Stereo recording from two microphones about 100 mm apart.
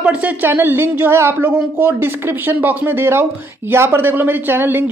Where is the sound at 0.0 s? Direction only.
15° right (ahead or behind).